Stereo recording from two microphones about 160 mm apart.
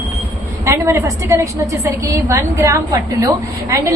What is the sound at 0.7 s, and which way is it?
A woman's voice, 15° right (ahead or behind).